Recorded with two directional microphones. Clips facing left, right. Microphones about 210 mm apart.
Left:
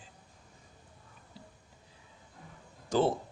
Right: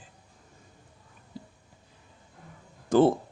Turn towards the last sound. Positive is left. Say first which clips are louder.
# right 7 dB
turn(degrees=-55)  # may be behind; listen again after turning